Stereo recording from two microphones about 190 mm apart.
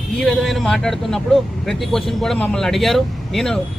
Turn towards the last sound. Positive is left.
turn(degrees=0)  # may be behind; listen again after turning